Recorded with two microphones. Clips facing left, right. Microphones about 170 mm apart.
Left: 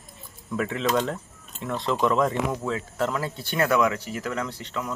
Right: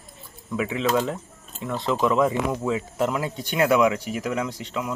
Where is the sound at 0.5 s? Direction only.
5° right (ahead or behind).